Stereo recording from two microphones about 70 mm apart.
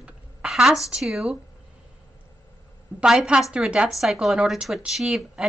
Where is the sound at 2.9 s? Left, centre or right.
Centre.